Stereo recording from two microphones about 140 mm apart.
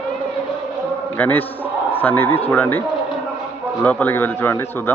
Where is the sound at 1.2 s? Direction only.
15° left (ahead or behind).